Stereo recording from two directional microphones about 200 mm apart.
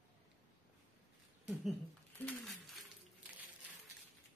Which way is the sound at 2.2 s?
Centre (ahead or behind).